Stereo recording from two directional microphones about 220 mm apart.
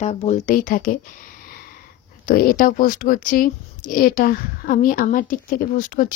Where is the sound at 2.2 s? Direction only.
40° left (ahead or behind).